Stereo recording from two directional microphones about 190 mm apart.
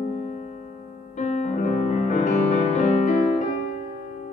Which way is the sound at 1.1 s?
40° left (ahead or behind).